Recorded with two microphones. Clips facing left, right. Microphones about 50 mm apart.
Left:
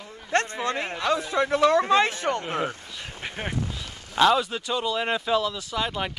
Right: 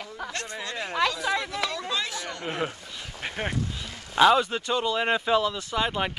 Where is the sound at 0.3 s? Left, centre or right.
Left.